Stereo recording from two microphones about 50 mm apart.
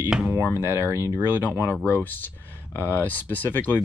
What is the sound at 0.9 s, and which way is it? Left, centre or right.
Speech, right.